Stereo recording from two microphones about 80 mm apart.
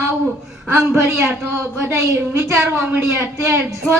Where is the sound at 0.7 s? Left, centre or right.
Right.